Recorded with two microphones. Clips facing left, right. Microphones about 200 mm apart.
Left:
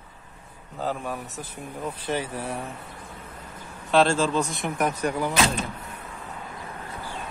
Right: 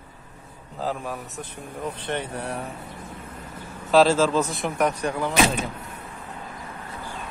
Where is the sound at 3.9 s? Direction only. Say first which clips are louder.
Right 3 dB; 5° right (ahead or behind).